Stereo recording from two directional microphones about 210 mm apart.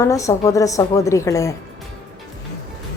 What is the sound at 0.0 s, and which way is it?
A woman's voice, 15° left (ahead or behind).